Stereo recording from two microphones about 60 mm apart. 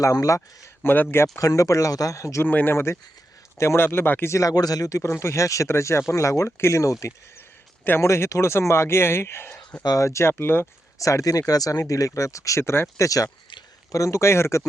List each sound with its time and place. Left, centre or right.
0.0 s speech: left
2.4 s speech: left
2.7 s speech: left
4.3 s speech: left
5.2 s speech: left
9.9 s speech: left
10.3 s speech: left
10.9 s speech: left
13.1 s speech: left
13.9 s speech: left